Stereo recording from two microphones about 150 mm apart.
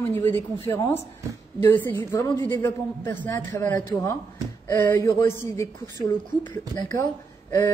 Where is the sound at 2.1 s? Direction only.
25° left (ahead or behind).